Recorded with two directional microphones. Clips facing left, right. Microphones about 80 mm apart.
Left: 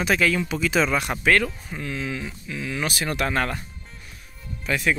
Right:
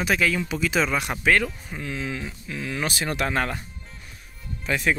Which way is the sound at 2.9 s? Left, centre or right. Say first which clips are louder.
Left 1 dB; right.